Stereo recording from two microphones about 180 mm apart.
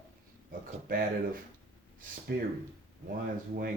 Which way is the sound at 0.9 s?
50° right (ahead or behind).